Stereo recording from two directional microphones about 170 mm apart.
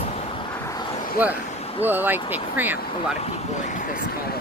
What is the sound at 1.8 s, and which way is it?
Speech, 10° right (ahead or behind).